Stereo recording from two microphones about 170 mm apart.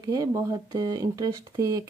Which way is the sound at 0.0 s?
20° right (ahead or behind).